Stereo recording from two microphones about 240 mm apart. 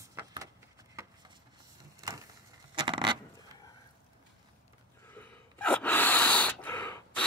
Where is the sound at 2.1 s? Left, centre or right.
Centre.